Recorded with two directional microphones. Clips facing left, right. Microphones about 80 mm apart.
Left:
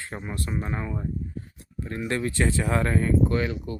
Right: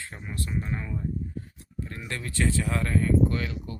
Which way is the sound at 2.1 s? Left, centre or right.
Left.